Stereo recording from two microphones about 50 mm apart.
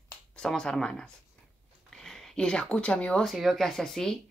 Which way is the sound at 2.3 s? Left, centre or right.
Centre.